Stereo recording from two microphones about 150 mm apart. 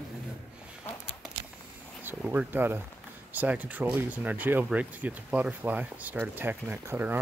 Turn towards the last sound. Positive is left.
turn(degrees=-15)  # may be behind; listen again after turning